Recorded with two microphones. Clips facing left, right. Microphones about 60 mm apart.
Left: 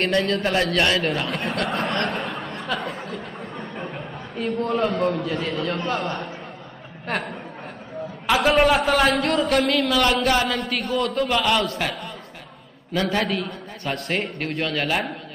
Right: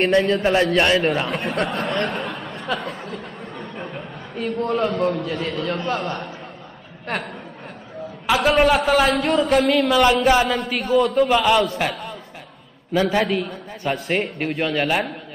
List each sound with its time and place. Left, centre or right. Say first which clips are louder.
0.0 s a man's voice: right 4 dB; centre
7.1 s a man's voice: even; centre
8.5 s a man's voice: right 2 dB; centre